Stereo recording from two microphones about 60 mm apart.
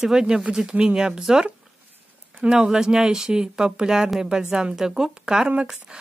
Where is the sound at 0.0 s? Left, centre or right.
Centre.